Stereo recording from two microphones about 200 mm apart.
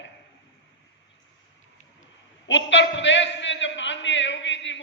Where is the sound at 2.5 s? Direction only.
65° left (ahead or behind).